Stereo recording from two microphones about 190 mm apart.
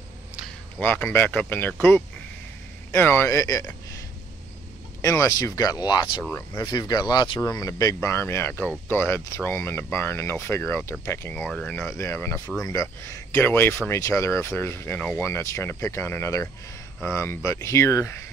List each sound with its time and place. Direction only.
0.7 s speech: 10° left (ahead or behind)
5.0 s speech: 15° left (ahead or behind)